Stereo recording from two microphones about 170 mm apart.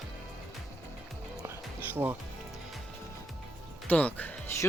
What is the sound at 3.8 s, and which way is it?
Speech, 10° left (ahead or behind).